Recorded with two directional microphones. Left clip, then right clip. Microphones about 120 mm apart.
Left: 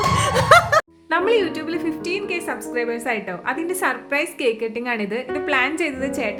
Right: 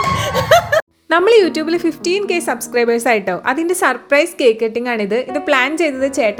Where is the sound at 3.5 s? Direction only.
55° right (ahead or behind).